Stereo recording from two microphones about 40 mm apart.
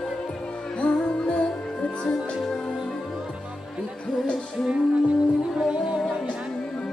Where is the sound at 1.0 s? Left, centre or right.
Left.